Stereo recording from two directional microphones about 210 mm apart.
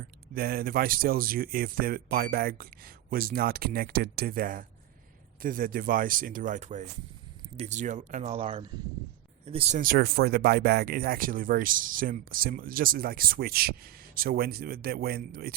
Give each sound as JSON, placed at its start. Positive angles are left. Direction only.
{"t": 0.3, "sound": "speech", "side_deg": -45}